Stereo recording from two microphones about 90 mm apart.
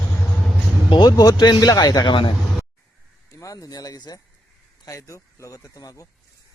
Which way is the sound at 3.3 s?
40° left (ahead or behind).